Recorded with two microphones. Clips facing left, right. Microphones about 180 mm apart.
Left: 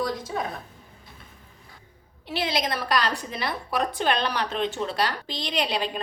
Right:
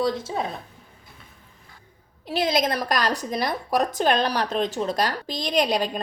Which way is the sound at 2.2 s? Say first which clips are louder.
Right 5 dB; 45° right (ahead or behind).